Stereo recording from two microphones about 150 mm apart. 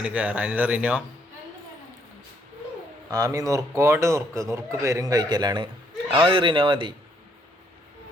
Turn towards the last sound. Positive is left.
turn(degrees=-35)  # may be behind; listen again after turning